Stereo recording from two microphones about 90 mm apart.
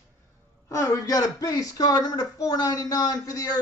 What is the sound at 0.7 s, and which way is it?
Speech, 35° left (ahead or behind).